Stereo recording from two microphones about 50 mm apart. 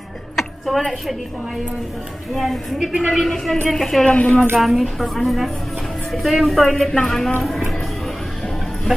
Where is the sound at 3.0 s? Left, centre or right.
Centre.